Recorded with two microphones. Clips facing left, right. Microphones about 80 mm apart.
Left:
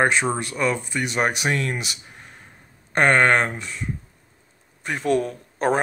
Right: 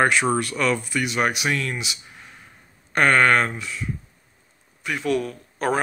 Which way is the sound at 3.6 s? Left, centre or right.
Left.